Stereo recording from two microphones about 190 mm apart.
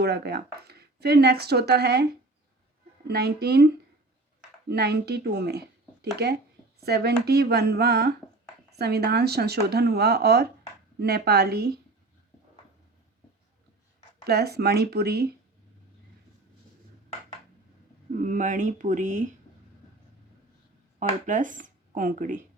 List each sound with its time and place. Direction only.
0.0 s speech: 60° right (ahead or behind)
3.1 s speech: 55° right (ahead or behind)
4.7 s speech: 60° right (ahead or behind)
14.3 s speech: 55° right (ahead or behind)
18.2 s speech: 45° right (ahead or behind)
21.0 s speech: 40° right (ahead or behind)